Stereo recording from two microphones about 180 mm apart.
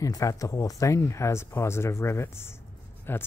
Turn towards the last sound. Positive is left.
turn(degrees=10)  # may be behind; listen again after turning